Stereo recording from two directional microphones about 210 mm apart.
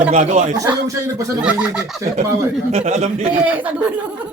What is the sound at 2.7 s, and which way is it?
Speech, 30° right (ahead or behind).